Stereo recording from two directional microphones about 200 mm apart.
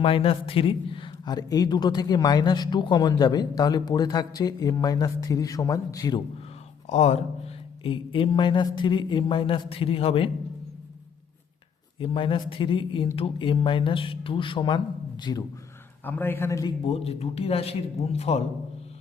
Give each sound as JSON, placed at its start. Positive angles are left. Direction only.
{"t": 0.0, "sound": "a man's voice", "side_deg": 25}
{"t": 6.8, "sound": "a man's voice", "side_deg": 35}
{"t": 11.9, "sound": "a man's voice", "side_deg": 25}
{"t": 16.8, "sound": "a man's voice", "side_deg": 30}